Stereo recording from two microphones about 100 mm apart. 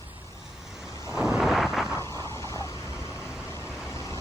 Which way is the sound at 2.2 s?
30° left (ahead or behind).